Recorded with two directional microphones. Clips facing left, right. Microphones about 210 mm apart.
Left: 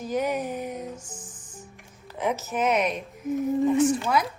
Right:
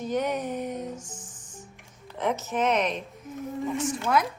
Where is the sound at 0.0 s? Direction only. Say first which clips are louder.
Left 1 dB; 5° left (ahead or behind).